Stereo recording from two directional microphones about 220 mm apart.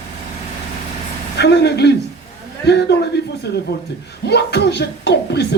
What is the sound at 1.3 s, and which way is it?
Speech, 50° left (ahead or behind).